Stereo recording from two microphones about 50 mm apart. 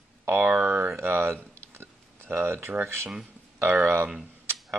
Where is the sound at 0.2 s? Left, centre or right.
Right.